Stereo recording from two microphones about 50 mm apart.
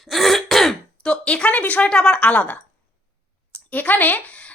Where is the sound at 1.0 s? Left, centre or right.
Left.